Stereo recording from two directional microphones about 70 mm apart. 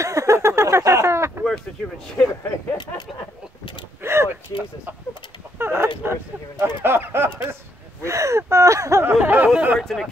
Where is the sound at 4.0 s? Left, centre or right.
Right.